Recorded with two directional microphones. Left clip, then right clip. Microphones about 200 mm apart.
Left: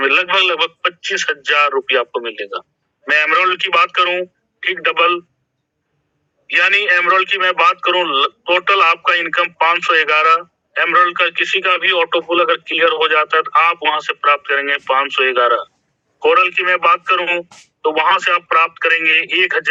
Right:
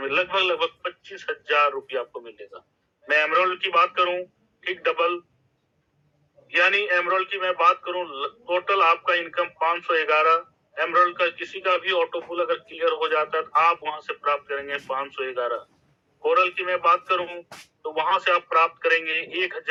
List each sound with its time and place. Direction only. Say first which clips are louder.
0.0 s a man's voice: left 10 dB; 45° left (ahead or behind)
6.5 s a man's voice: left 8 dB; 45° left (ahead or behind)